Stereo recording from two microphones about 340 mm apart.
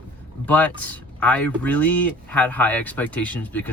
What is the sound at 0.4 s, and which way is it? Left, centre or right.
Speech, centre.